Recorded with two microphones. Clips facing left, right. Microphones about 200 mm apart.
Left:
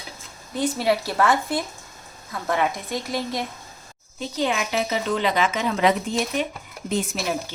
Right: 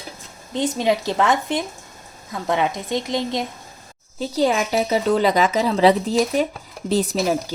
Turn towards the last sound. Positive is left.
turn(degrees=-35)  # may be behind; listen again after turning